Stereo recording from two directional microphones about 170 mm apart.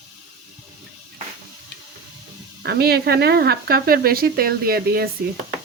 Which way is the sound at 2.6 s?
75° right (ahead or behind).